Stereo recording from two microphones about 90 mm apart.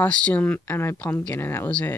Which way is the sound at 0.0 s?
15° left (ahead or behind).